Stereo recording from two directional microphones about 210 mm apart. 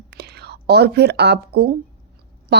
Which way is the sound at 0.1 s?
50° right (ahead or behind).